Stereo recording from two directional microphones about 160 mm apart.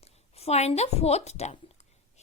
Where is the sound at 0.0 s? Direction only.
40° left (ahead or behind).